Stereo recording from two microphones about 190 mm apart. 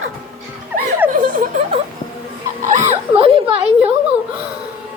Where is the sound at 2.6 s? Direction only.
40° right (ahead or behind).